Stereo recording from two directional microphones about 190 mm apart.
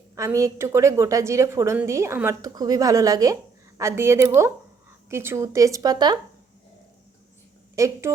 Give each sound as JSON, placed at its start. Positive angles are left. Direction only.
{"t": 0.2, "sound": "a woman's voice", "side_deg": -15}
{"t": 7.8, "sound": "a woman's voice", "side_deg": -15}